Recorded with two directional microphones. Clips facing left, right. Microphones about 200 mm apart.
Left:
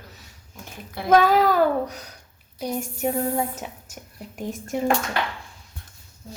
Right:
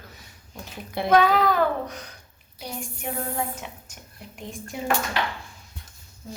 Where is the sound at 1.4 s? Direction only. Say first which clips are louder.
Left 3 dB; 40° left (ahead or behind).